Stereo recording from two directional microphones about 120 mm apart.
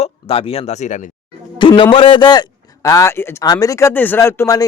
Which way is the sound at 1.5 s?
45° left (ahead or behind).